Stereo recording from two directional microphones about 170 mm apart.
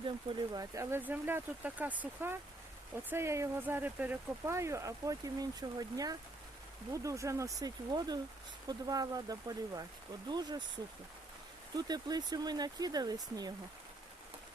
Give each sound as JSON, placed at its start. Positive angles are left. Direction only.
{"t": 0.5, "sound": "speech", "side_deg": -20}
{"t": 11.8, "sound": "speech", "side_deg": -25}